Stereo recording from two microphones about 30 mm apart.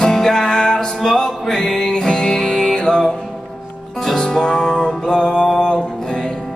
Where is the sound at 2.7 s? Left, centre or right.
Left.